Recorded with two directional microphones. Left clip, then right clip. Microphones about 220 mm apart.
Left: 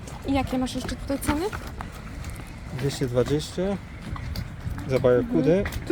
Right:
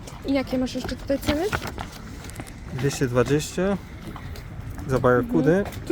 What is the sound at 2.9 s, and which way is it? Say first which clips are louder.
Speech: right 2 dB; 30° right (ahead or behind).